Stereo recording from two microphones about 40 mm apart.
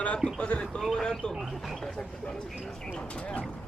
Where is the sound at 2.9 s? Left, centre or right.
Left.